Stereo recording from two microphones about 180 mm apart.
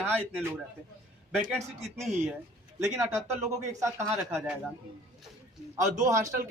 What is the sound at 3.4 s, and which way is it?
Speech, 15° right (ahead or behind).